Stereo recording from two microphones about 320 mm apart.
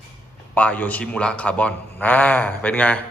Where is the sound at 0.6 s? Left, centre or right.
Centre.